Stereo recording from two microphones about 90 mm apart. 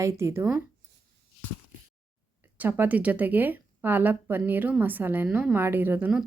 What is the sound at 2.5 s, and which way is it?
Speech, 20° right (ahead or behind).